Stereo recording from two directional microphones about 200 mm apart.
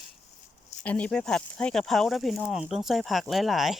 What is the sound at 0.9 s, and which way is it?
Speech, 5° left (ahead or behind).